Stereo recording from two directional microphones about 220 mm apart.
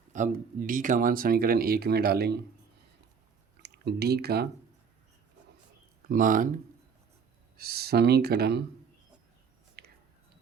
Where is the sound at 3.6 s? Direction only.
50° right (ahead or behind).